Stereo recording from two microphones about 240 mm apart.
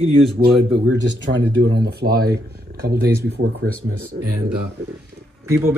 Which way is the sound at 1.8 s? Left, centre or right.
Right.